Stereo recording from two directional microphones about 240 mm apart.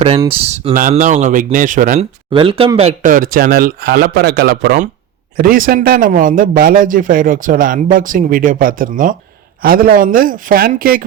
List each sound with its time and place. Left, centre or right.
0.0 s speech: right
2.3 s speech: right